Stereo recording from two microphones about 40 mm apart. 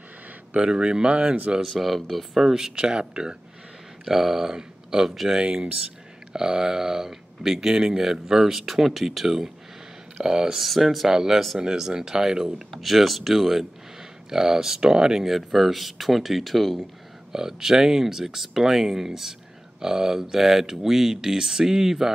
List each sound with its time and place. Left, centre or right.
0.6 s speech: right
1.8 s speech: centre
2.3 s speech: centre
2.8 s speech: right
4.0 s speech: centre
5.4 s speech: right; by 9.5 s centre
10.1 s speech: centre
10.6 s speech: centre
12.7 s speech: centre
17.3 s speech: centre